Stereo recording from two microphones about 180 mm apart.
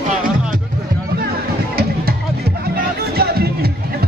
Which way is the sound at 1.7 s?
60° right (ahead or behind).